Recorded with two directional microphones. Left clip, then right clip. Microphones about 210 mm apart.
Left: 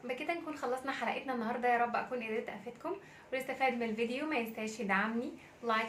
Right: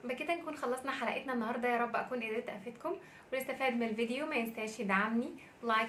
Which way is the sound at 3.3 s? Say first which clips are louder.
Left 1 dB; 10° right (ahead or behind).